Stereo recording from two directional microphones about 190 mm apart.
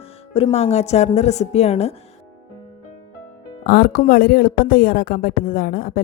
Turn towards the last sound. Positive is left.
turn(degrees=50)  # may be behind; listen again after turning